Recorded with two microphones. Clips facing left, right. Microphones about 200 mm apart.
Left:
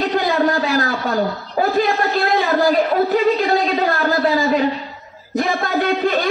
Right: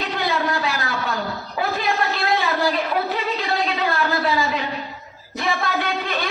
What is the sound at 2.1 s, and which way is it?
A woman's voice, 40° left (ahead or behind).